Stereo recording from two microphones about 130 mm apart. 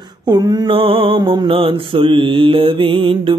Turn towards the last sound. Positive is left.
turn(degrees=-40)  # may be behind; listen again after turning